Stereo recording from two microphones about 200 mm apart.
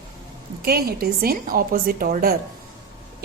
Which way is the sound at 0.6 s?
50° right (ahead or behind).